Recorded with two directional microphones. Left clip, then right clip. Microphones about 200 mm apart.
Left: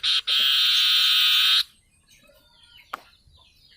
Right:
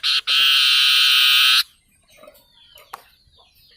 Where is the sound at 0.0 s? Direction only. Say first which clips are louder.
Right 4 dB; 15° right (ahead or behind).